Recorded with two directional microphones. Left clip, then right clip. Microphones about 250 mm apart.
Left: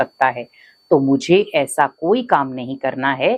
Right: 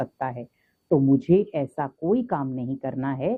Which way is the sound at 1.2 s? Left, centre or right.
Centre.